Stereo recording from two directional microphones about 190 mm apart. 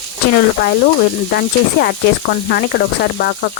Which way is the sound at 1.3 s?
55° left (ahead or behind).